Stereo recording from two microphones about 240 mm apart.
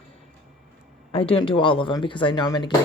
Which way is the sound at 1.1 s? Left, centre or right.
Left.